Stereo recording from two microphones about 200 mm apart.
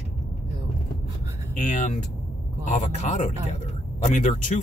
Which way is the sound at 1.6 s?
40° left (ahead or behind).